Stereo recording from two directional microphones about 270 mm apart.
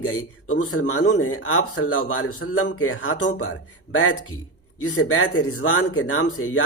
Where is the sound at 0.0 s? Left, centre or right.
Left.